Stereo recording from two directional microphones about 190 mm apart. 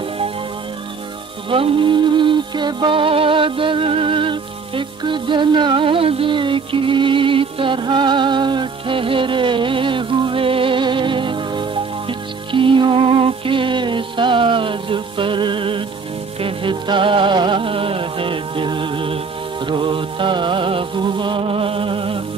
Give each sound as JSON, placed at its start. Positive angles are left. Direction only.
{"t": 1.5, "sound": "music", "side_deg": -25}